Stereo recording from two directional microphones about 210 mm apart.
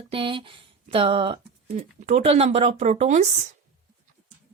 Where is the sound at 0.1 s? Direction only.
25° right (ahead or behind).